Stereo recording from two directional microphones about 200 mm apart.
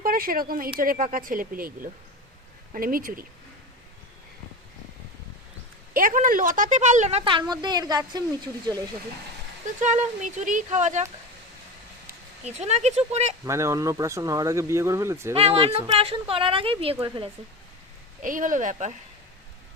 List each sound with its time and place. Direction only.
0.0 s speech: 45° right (ahead or behind)
5.9 s speech: 45° right (ahead or behind); by 8.2 s 20° right (ahead or behind)
9.8 s speech: 35° right (ahead or behind)
12.5 s speech: 35° right (ahead or behind)
13.4 s speech: 15° right (ahead or behind)
15.4 s speech: 30° right (ahead or behind)
18.2 s speech: 40° right (ahead or behind)